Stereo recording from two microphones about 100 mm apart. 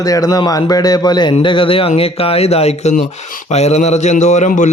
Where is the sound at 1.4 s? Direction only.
60° left (ahead or behind); by 3.9 s 90° left.